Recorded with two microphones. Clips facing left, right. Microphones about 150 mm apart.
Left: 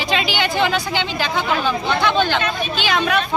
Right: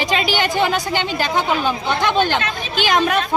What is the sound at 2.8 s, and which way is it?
Speech, 45° right (ahead or behind).